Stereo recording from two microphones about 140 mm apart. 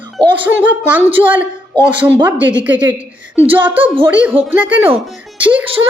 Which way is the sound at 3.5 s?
15° right (ahead or behind).